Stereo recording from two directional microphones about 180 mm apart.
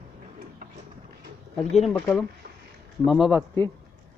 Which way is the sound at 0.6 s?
50° right (ahead or behind).